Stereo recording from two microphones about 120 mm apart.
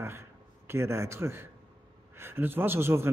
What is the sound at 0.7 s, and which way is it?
Speech, 20° right (ahead or behind).